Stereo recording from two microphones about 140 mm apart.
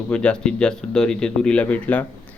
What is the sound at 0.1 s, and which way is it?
Speech, 10° left (ahead or behind).